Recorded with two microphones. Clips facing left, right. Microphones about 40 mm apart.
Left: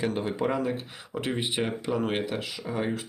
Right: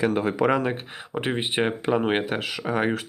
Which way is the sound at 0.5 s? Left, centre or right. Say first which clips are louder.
Right 3 dB; right.